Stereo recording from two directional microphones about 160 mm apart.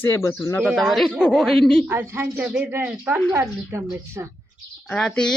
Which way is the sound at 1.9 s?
15° right (ahead or behind).